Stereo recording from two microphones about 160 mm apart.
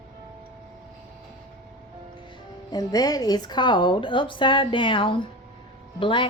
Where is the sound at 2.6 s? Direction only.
25° left (ahead or behind).